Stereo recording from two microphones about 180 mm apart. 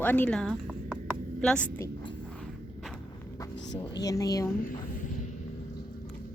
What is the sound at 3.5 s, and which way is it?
Speech, 85° left.